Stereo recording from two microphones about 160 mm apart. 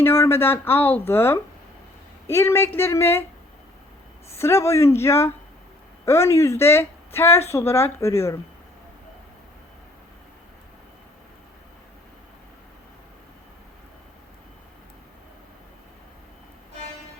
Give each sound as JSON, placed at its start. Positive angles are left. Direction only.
{"t": 0.0, "sound": "speech", "side_deg": 15}
{"t": 4.4, "sound": "speech", "side_deg": 15}